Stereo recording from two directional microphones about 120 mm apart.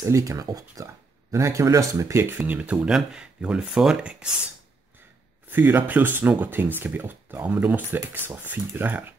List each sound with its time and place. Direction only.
0.0 s speech: 25° right (ahead or behind)
2.3 s speech: 10° right (ahead or behind)
5.5 s speech: 15° right (ahead or behind)